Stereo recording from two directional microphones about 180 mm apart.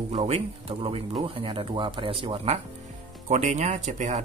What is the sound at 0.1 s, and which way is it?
Speech, 35° right (ahead or behind).